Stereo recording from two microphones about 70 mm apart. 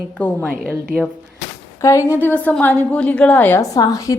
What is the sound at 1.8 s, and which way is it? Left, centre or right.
Speech, left.